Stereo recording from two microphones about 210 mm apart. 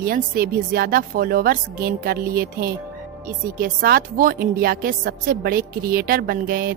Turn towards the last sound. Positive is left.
turn(degrees=-45)  # may be behind; listen again after turning